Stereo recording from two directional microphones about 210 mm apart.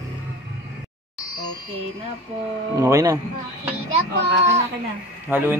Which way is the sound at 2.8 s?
15° right (ahead or behind).